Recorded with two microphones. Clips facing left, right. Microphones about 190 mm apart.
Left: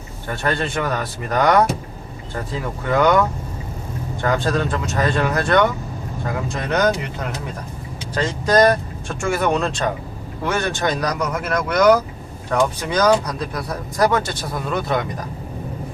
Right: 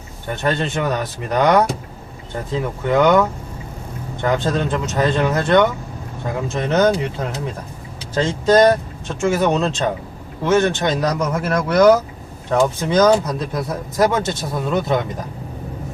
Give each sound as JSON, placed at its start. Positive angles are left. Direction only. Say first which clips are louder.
{"t": 0.3, "sound": "speech", "louder": "right 2 dB", "side_deg": -20}
{"t": 2.9, "sound": "speech", "louder": "right 2 dB", "side_deg": -20}